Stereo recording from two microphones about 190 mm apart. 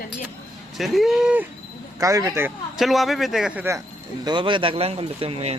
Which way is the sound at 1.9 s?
15° right (ahead or behind).